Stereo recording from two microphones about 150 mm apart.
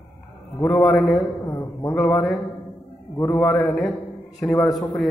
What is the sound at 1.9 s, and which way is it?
A man's voice, 5° left (ahead or behind).